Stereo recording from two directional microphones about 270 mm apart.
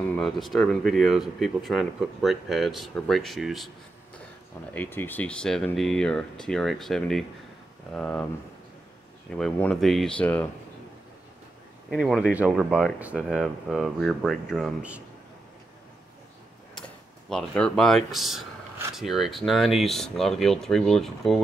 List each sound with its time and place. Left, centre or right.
0.1 s speech: centre
4.7 s speech: centre
9.3 s speech: centre
11.9 s speech: centre
17.3 s speech: centre